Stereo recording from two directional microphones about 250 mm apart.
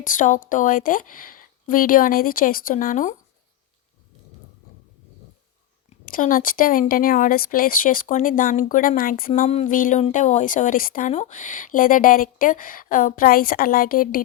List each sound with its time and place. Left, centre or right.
0.0 s speech: left
6.1 s speech: left